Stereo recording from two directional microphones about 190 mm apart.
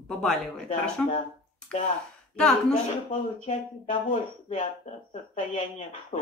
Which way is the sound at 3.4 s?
40° left (ahead or behind).